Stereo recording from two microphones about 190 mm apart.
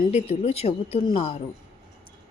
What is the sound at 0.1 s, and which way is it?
A woman's voice, 35° left (ahead or behind).